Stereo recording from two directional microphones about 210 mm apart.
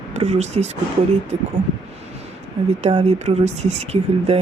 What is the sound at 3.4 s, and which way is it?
Speech, 30° right (ahead or behind).